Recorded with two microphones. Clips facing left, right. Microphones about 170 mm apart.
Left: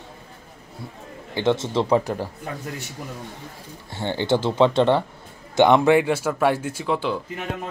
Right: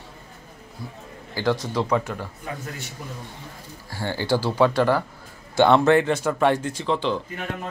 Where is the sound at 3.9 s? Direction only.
25° left (ahead or behind).